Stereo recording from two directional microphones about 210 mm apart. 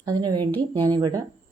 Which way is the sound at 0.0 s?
20° right (ahead or behind).